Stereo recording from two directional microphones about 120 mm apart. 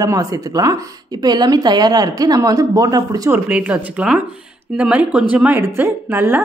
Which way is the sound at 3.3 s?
10° right (ahead or behind).